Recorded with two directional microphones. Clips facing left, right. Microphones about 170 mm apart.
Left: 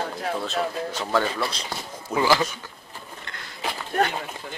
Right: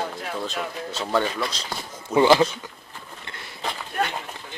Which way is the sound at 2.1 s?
25° right (ahead or behind).